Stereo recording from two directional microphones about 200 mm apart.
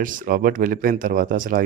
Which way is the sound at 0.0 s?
40° right (ahead or behind).